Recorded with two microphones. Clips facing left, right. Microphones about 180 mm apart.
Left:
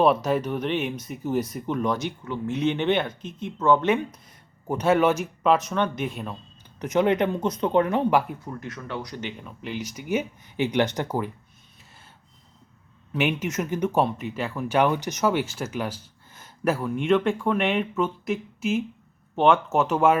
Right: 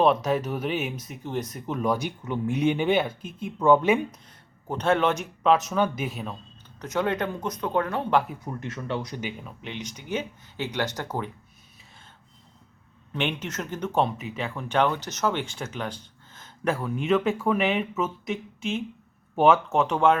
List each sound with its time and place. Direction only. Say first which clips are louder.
0.0 s speech: left 1 dB; centre (ahead or behind)
4.7 s speech: left 3 dB; 10° left (ahead or behind)
6.7 s speech: left 5 dB; 15° left (ahead or behind)
8.6 s speech: right 5 dB; 25° right (ahead or behind)
9.2 s speech: left 1 dB; centre (ahead or behind); by 11.2 s 20° left (ahead or behind)
13.1 s speech: left 4 dB; 5° left (ahead or behind)